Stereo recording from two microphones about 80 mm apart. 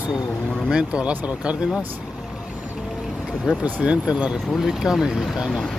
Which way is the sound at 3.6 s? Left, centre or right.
Centre.